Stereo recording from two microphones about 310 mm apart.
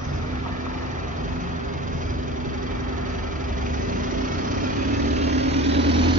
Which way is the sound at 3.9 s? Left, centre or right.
Right.